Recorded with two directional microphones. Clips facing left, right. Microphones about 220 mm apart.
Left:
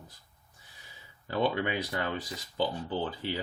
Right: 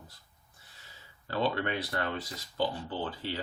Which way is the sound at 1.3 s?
15° left (ahead or behind).